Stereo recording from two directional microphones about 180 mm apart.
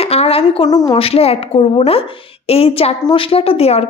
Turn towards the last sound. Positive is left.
turn(degrees=35)  # may be behind; listen again after turning